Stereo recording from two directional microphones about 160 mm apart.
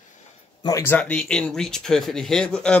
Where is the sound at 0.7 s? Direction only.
15° left (ahead or behind).